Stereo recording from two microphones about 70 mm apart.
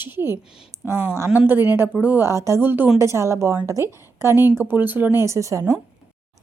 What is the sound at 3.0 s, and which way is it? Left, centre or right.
A woman's voice, right.